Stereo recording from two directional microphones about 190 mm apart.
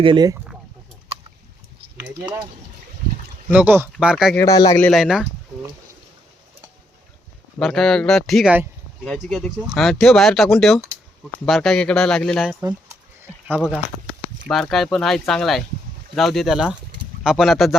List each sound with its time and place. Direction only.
0.0 s speech: 25° right (ahead or behind)
3.5 s speech: 10° right (ahead or behind)
4.4 s speech: 20° left (ahead or behind)
4.8 s speech: centre (ahead or behind)
7.6 s speech: 5° left (ahead or behind)